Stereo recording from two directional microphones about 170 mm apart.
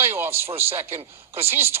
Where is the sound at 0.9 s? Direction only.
35° right (ahead or behind).